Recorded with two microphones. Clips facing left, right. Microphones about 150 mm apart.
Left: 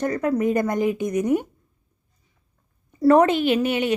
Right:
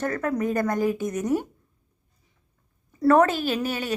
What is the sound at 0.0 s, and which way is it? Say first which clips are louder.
A woman's voice: left 4 dB; 15° left (ahead or behind).